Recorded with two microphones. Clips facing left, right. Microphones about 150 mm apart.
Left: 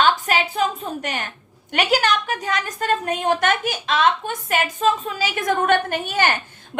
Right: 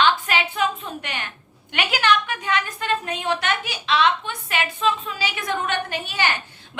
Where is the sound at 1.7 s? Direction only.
40° left (ahead or behind).